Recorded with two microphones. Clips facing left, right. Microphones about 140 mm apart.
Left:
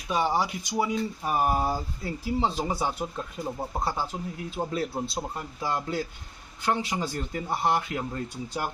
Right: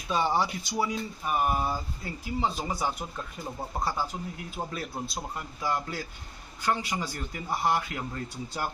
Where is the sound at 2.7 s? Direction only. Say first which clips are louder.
Left 2 dB; 25° left (ahead or behind).